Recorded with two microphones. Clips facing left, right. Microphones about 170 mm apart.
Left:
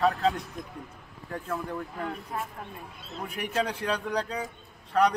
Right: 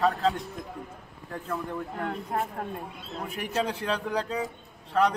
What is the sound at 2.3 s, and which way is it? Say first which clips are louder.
Speech: right 6 dB; 60° right (ahead or behind).